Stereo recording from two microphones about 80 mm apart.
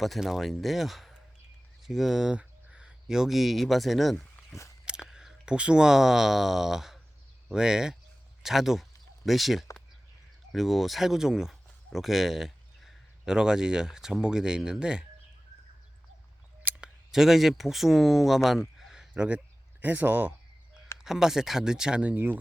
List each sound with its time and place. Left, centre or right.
0.0 s speech: centre
16.7 s scissors: centre
17.1 s speech: centre
18.8 s a sound: centre
19.1 s speech: centre
21.0 s speech: centre
22.1 s speech: right